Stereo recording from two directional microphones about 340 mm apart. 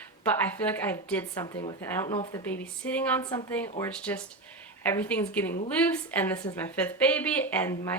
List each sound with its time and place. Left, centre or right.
0.3 s a woman's voice: centre